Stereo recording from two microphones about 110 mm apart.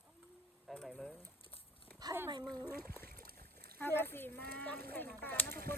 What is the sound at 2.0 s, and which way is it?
Dog, 35° right (ahead or behind).